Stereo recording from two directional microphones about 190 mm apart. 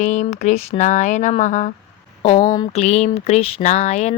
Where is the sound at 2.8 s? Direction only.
35° left (ahead or behind).